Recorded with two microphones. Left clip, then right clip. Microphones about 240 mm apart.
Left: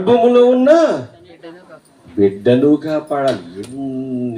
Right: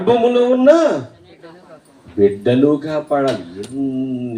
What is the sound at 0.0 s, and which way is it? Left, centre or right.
Speech, left.